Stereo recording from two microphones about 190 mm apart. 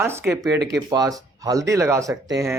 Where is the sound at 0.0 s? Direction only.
15° right (ahead or behind).